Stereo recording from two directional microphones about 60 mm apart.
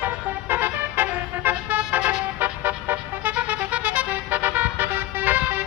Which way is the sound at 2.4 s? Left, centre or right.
Right.